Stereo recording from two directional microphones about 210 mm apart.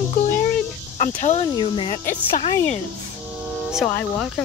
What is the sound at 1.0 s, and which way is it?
Speech, 35° left (ahead or behind).